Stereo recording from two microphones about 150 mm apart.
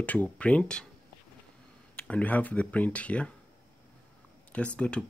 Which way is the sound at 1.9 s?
10° left (ahead or behind).